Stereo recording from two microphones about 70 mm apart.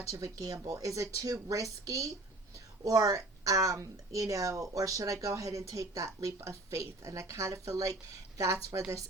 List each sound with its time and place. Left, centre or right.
0.1 s speech: right